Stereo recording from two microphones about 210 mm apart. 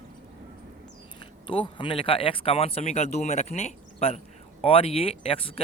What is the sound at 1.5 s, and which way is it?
Speech, 25° left (ahead or behind).